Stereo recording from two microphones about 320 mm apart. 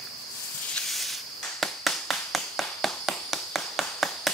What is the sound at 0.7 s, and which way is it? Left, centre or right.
Snake, centre.